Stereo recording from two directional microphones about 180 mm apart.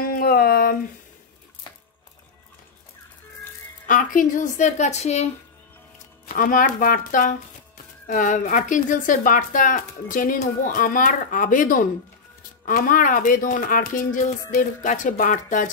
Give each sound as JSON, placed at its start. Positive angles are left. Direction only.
{"t": 0.0, "sound": "a sound", "side_deg": 55}
{"t": 3.8, "sound": "speech", "side_deg": 50}
{"t": 6.2, "sound": "speech", "side_deg": 50}